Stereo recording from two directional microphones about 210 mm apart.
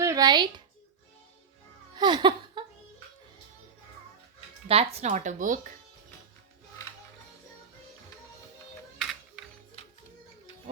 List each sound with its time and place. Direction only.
0.0 s a sound: 15° right (ahead or behind)
2.0 s laughter: 20° right (ahead or behind)
4.7 s speech: 30° right (ahead or behind)